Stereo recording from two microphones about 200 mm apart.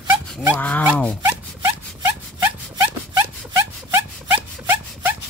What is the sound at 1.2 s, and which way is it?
Zipper, 15° right (ahead or behind).